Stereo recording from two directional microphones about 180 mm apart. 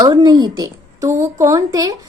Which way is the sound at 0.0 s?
20° right (ahead or behind).